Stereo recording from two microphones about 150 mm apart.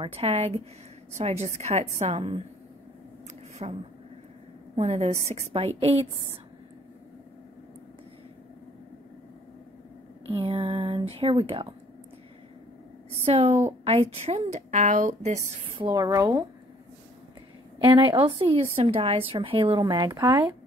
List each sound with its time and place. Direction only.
0.0 s a woman's voice: 40° right (ahead or behind)
3.6 s a woman's voice: 40° right (ahead or behind)
10.4 s a woman's voice: 35° right (ahead or behind)
13.2 s a woman's voice: 45° right (ahead or behind)
15.7 s speech: 30° right (ahead or behind)
17.7 s a woman's voice: 35° right (ahead or behind)